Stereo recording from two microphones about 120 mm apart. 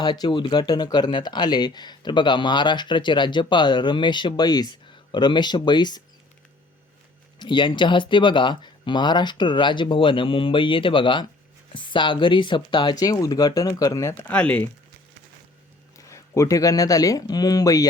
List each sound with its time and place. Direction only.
0.0 s speech: 35° left (ahead or behind)
7.3 s speech: 40° left (ahead or behind)
14.3 s speech: 10° left (ahead or behind)
16.0 s speech: 25° left (ahead or behind)